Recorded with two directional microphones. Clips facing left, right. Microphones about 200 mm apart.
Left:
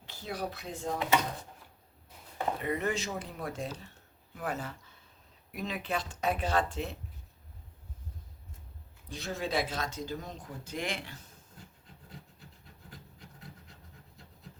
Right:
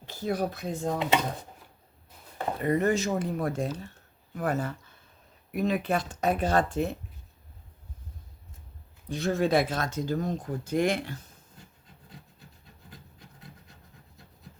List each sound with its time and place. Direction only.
0.0 s speech: 45° right (ahead or behind)
2.6 s speech: 45° right (ahead or behind)
9.0 s speech: 55° right (ahead or behind)